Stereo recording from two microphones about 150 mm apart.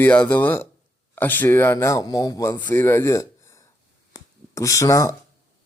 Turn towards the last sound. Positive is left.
turn(degrees=20)  # may be behind; listen again after turning